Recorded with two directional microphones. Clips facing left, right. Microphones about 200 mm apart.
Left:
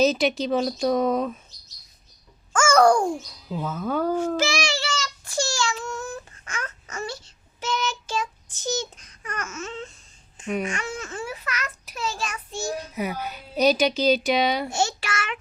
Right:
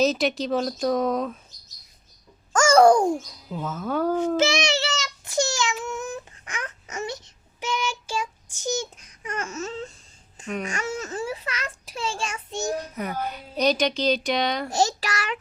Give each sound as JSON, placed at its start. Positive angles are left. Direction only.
{"t": 0.0, "sound": "speech", "side_deg": 0}
{"t": 2.5, "sound": "a sound", "side_deg": -40}
{"t": 2.8, "sound": "a sound", "side_deg": -20}
{"t": 3.5, "sound": "speech", "side_deg": 0}
{"t": 4.4, "sound": "child singing", "side_deg": -20}
{"t": 9.3, "sound": "a sound", "side_deg": -30}
{"t": 10.7, "sound": "a child's voice", "side_deg": -40}
{"t": 13.2, "sound": "speech", "side_deg": 5}
{"t": 14.7, "sound": "a child's voice", "side_deg": -35}